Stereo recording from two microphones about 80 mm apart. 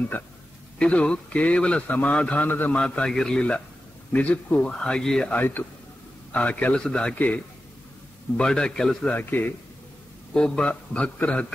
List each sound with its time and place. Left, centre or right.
0.1 s a man's voice: left
2.8 s a man's voice: centre
5.3 s a man's voice: left
10.3 s a man's voice: centre